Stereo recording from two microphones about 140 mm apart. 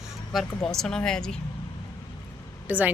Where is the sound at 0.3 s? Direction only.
5° left (ahead or behind).